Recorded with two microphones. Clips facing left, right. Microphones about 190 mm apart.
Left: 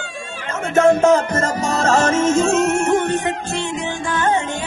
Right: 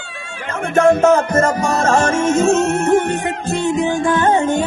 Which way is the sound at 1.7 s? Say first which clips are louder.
Right 1 dB; 55° right (ahead or behind).